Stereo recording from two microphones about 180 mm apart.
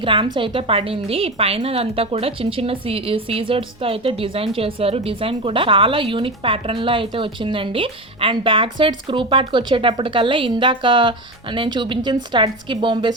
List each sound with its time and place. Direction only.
0.0 s a woman's voice: 30° right (ahead or behind)